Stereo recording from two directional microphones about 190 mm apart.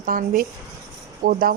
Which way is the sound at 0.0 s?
45° right (ahead or behind).